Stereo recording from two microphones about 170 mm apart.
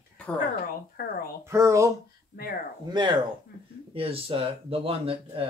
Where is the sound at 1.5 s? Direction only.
15° right (ahead or behind).